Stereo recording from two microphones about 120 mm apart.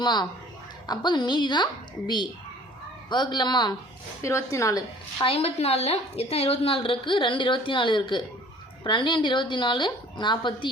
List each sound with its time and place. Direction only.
0.0 s a woman's voice: 35° left (ahead or behind)
4.2 s a woman's voice: 25° left (ahead or behind)
5.2 s a woman's voice: 55° left (ahead or behind); by 10.7 s 40° left (ahead or behind)